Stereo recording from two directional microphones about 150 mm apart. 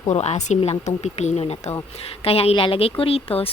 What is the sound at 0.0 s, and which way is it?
A woman's voice, 45° left (ahead or behind).